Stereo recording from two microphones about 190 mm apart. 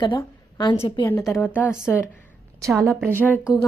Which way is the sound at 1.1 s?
10° left (ahead or behind).